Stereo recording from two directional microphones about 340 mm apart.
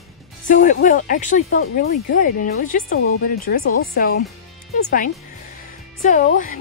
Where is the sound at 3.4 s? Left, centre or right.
Left.